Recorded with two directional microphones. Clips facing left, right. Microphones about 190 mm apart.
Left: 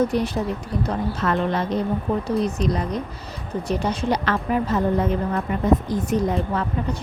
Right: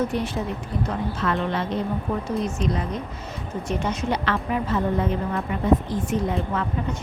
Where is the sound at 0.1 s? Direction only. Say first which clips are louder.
Left 3 dB; 35° left (ahead or behind).